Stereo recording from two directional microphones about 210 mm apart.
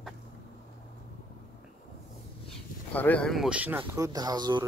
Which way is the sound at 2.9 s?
5° left (ahead or behind).